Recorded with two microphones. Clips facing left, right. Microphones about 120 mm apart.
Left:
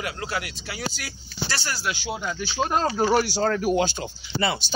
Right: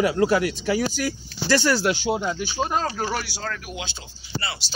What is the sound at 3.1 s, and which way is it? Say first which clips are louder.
Speech: left 9 dB; 40° left (ahead or behind).